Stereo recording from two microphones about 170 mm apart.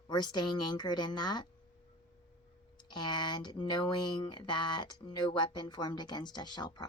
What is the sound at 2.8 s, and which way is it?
Speech, 25° left (ahead or behind).